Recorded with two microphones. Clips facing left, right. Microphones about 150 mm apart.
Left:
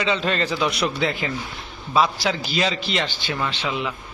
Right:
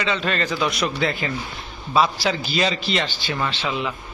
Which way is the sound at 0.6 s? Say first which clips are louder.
Right 1 dB; 10° left (ahead or behind).